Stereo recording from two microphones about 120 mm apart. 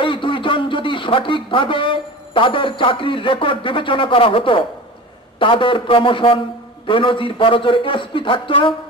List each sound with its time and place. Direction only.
0.0 s a man's voice: 45° left (ahead or behind)